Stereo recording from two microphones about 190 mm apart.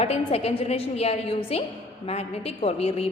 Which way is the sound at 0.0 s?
30° left (ahead or behind).